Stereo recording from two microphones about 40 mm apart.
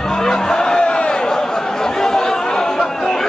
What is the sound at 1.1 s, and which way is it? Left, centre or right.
Chatter, centre.